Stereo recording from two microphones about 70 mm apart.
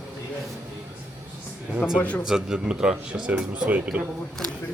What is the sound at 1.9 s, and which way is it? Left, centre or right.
Speech, left.